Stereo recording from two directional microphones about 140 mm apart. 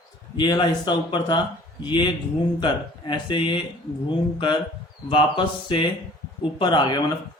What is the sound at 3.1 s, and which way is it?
Speech, 35° left (ahead or behind).